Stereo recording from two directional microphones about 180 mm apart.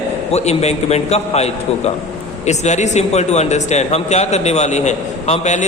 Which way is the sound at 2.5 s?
40° left (ahead or behind).